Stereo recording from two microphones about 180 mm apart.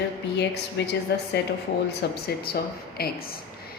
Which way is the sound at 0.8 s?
75° left (ahead or behind).